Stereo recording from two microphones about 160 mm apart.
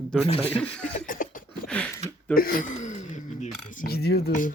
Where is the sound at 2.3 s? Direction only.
65° left (ahead or behind); by 3.0 s 50° left (ahead or behind).